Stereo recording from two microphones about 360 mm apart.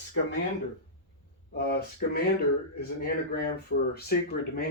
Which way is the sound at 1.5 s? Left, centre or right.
Left.